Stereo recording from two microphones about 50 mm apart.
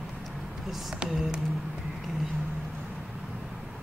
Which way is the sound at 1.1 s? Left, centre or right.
Centre.